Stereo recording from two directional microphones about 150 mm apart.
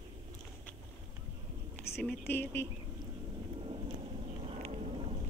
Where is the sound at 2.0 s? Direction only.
15° left (ahead or behind).